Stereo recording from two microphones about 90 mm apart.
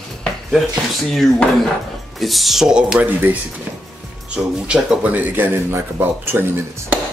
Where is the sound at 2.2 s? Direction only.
Centre (ahead or behind).